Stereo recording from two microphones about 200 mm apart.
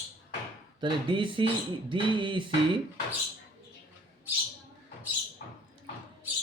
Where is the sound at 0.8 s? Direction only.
25° right (ahead or behind).